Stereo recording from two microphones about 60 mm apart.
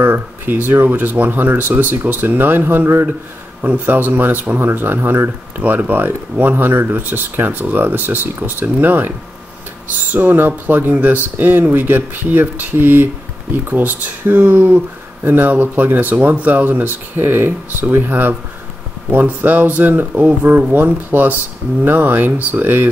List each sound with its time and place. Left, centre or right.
0.0 s speech: right
5.6 s speech: right
10.1 s speech: right